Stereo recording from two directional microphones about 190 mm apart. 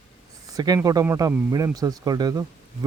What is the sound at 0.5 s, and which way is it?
Speech, 20° right (ahead or behind).